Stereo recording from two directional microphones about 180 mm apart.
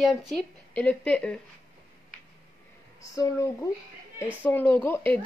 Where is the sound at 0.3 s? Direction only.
5° left (ahead or behind).